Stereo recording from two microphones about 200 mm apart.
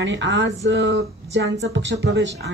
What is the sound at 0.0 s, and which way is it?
Speech, 65° right (ahead or behind).